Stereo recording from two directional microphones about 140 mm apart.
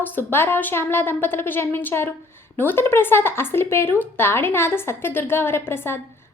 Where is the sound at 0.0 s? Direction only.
15° left (ahead or behind).